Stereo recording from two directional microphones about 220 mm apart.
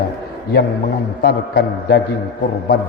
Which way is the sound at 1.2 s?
45° left (ahead or behind).